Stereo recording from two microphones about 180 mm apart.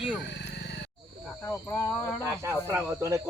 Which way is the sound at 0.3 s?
70° left (ahead or behind).